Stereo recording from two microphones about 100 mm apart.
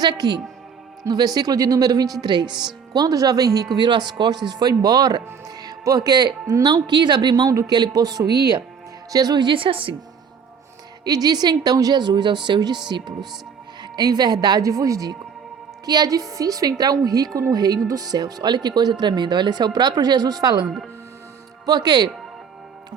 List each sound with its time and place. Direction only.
0.0 s a woman's voice: 45° right (ahead or behind)
3.8 s speech: 50° right (ahead or behind); by 7.7 s 35° right (ahead or behind)
7.7 s a woman's voice: 45° right (ahead or behind); by 9.9 s 60° right (ahead or behind)
11.0 s speech: 40° right (ahead or behind)
13.8 s a woman's voice: 45° right (ahead or behind)
21.7 s speech: 45° right (ahead or behind)